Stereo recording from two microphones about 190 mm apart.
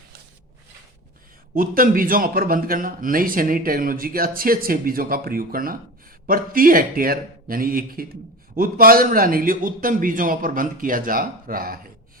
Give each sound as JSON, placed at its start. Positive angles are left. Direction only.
{"t": 1.5, "sound": "a man's voice", "side_deg": -50}